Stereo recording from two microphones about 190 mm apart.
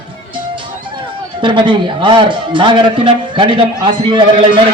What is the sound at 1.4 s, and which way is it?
A man's voice, 25° right (ahead or behind).